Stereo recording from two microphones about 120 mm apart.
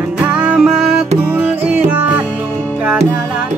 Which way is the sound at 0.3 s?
10° right (ahead or behind).